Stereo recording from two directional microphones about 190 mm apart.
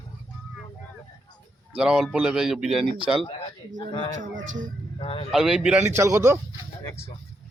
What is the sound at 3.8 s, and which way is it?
Speech, 25° left (ahead or behind).